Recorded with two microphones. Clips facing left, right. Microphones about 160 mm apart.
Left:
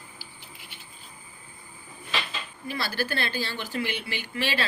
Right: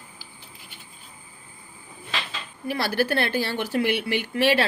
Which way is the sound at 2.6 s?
70° right (ahead or behind).